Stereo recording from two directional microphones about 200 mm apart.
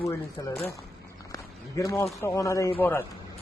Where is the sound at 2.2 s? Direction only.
15° left (ahead or behind).